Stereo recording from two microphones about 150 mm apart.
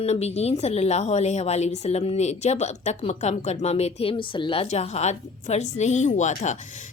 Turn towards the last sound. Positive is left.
turn(degrees=55)  # may be behind; listen again after turning